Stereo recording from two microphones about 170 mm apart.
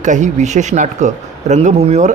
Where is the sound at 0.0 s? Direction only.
45° right (ahead or behind).